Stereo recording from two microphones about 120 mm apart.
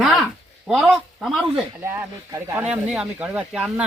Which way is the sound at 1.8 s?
20° right (ahead or behind).